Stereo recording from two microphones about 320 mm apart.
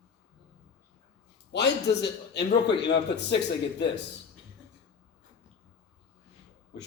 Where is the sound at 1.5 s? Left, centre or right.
Left.